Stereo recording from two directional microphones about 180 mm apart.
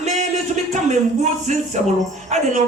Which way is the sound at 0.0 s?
40° right (ahead or behind).